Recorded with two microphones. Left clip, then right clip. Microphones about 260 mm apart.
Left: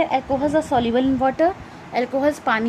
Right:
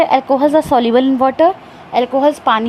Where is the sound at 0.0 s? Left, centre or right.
Right.